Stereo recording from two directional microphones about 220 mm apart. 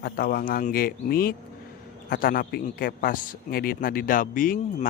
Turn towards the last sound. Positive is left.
turn(degrees=35)  # may be behind; listen again after turning